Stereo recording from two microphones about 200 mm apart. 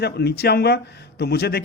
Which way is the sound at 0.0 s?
55° left (ahead or behind).